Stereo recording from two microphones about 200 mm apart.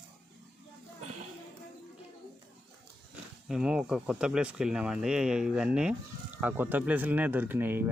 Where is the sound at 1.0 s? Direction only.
35° right (ahead or behind).